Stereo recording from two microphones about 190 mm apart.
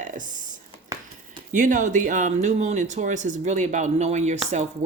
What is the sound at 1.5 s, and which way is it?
A woman's voice, 40° right (ahead or behind).